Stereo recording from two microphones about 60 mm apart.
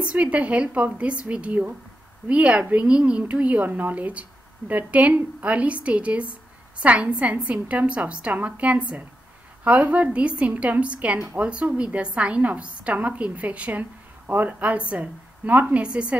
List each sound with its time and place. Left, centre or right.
0.1 s a woman's voice: right